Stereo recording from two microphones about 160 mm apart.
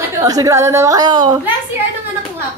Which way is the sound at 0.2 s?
20° right (ahead or behind).